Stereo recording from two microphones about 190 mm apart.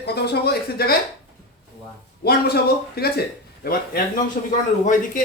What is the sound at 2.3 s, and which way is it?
A man's voice, 55° left (ahead or behind).